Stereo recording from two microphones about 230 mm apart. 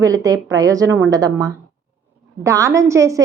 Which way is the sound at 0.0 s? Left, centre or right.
Centre.